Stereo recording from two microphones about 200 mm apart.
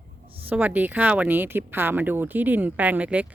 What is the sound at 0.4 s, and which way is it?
A woman's voice, 10° right (ahead or behind).